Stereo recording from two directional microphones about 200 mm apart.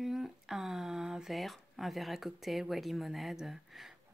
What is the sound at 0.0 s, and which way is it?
Speech, centre (ahead or behind).